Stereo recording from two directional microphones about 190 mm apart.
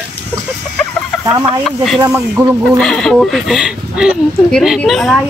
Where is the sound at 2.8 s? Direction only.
5° left (ahead or behind).